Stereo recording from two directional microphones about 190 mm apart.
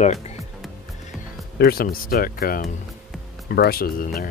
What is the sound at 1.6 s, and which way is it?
Speech, 50° left (ahead or behind).